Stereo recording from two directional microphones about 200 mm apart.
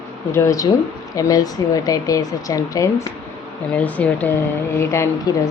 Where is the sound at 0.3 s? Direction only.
15° left (ahead or behind).